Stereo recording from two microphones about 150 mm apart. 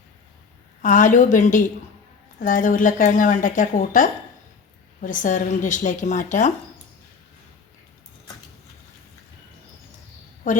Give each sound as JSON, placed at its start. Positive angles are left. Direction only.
{"t": 0.8, "sound": "speech", "side_deg": 55}